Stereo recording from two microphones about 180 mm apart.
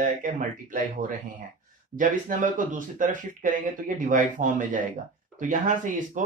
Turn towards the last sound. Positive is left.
turn(degrees=-45)  # may be behind; listen again after turning